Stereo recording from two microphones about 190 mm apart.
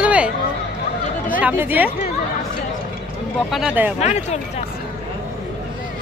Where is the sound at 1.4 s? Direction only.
10° right (ahead or behind).